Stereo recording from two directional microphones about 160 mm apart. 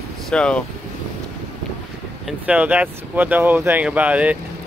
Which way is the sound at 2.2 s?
10° right (ahead or behind).